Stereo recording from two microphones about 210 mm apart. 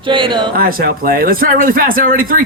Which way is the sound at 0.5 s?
45° right (ahead or behind).